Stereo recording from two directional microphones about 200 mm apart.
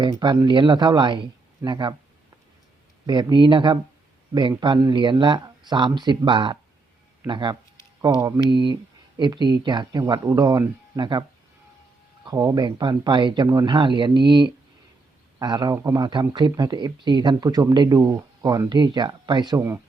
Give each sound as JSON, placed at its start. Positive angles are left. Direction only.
{"t": 0.0, "sound": "speech", "side_deg": -20}
{"t": 3.1, "sound": "speech", "side_deg": -20}